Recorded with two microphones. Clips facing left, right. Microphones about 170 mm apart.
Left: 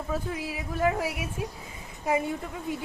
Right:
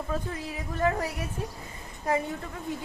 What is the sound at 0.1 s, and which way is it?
A woman's voice, 5° left (ahead or behind).